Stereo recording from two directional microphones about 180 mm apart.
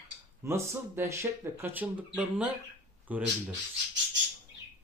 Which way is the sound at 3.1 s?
10° right (ahead or behind).